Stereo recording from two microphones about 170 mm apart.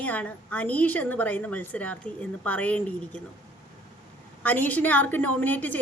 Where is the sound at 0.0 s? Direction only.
10° left (ahead or behind).